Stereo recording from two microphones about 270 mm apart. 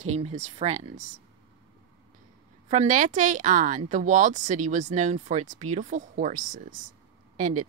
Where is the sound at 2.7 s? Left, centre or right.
Right.